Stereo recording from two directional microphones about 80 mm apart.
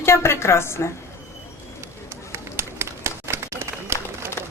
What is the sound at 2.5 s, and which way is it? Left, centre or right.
Run, right.